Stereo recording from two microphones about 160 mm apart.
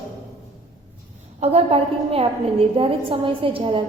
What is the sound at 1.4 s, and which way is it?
A woman's voice, 40° right (ahead or behind).